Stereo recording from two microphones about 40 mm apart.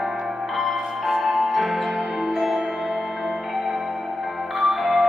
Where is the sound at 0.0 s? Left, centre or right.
Centre.